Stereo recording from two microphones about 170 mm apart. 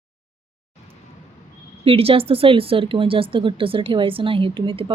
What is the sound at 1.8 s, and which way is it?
Speech, 35° right (ahead or behind).